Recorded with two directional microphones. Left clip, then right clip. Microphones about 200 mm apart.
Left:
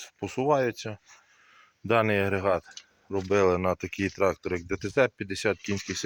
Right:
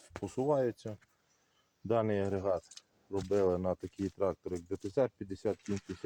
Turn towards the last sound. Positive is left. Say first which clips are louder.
# left 9 dB
turn(degrees=5)  # may be behind; listen again after turning